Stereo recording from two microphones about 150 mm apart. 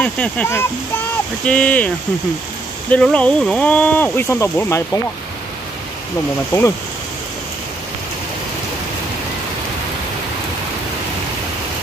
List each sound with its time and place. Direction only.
0.0 s speech: 10° left (ahead or behind)
2.9 s speech: 10° left (ahead or behind)
6.5 s speech: 25° left (ahead or behind)